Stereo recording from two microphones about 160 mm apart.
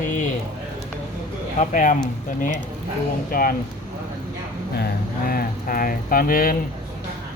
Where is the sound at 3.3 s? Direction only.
60° left (ahead or behind).